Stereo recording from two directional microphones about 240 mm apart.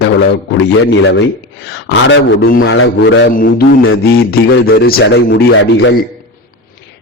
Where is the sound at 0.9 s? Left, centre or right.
Left.